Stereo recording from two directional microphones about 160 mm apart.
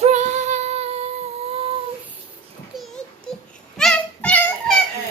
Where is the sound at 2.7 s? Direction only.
5° right (ahead or behind).